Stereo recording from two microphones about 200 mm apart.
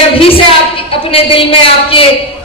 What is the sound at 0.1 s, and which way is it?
A woman's voice, 25° left (ahead or behind).